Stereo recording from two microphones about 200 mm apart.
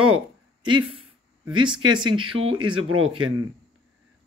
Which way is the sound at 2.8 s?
90° right.